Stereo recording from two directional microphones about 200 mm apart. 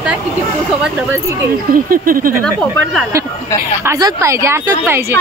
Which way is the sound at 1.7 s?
45° right (ahead or behind).